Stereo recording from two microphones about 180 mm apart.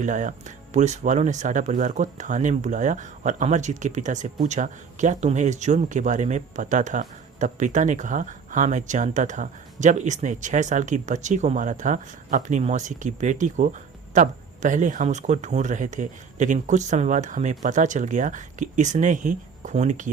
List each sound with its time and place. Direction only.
0.0 s speech: 45° right (ahead or behind)